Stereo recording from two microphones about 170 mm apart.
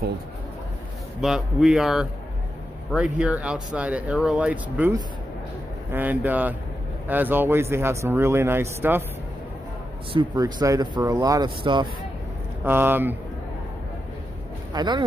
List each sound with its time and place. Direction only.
1.2 s speech: centre (ahead or behind)
10.1 s speech: 20° right (ahead or behind)
12.6 s speech: 10° right (ahead or behind)
14.7 s speech: 25° right (ahead or behind)